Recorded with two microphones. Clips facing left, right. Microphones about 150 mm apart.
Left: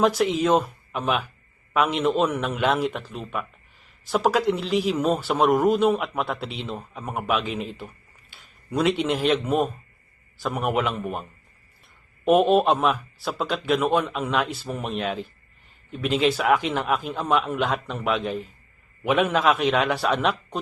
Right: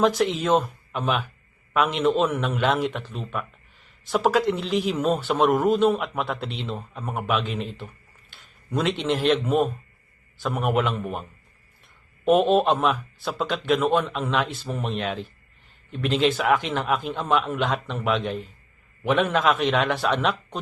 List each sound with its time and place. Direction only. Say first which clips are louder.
0.0 s a man's voice: left 1 dB; centre (ahead or behind)